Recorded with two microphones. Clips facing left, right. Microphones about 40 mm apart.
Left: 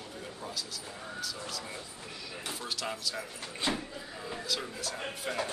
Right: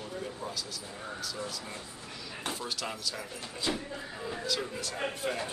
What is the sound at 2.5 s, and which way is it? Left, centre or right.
Speech, centre.